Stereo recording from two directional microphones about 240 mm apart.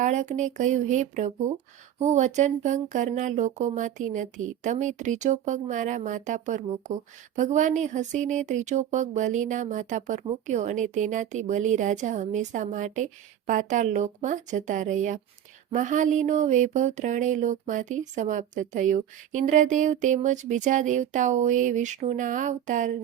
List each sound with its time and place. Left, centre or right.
0.0 s speech: right